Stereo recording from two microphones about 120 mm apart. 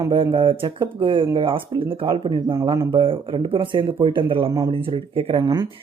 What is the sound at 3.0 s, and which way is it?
Speech, 45° right (ahead or behind).